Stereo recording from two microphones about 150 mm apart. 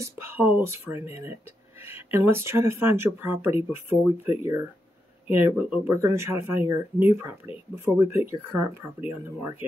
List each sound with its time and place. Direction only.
0.0 s speech: 15° right (ahead or behind)
9.6 s speech: 35° left (ahead or behind)